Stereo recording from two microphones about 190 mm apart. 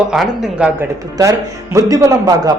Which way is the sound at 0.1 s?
5° right (ahead or behind).